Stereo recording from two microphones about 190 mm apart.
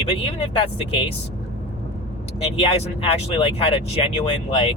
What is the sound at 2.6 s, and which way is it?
Speech, 30° left (ahead or behind).